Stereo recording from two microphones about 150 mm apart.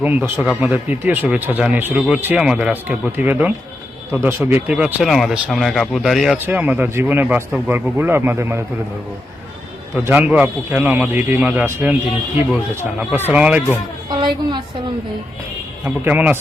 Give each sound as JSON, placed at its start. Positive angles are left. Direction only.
{"t": 0.0, "sound": "speech", "side_deg": -10}
{"t": 9.9, "sound": "speech", "side_deg": -10}
{"t": 14.1, "sound": "a woman's voice", "side_deg": -30}
{"t": 15.8, "sound": "speech", "side_deg": -10}